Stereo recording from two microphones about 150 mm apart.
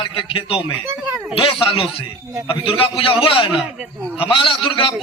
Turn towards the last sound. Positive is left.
turn(degrees=35)  # may be behind; listen again after turning